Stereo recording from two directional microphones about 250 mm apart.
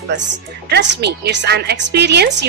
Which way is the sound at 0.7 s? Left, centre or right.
Right.